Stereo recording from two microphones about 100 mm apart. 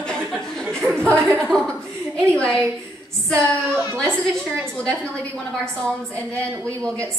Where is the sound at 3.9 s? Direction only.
5° left (ahead or behind).